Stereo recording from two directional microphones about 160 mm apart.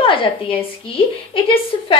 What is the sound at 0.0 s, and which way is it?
A woman's voice, 35° left (ahead or behind).